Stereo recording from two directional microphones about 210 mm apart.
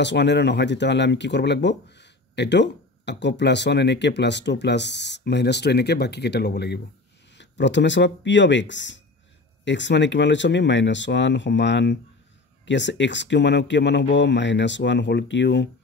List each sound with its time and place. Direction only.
0.0 s speech: 55° left (ahead or behind)